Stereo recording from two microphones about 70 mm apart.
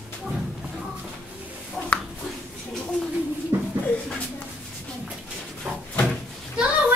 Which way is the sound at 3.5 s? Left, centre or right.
Right.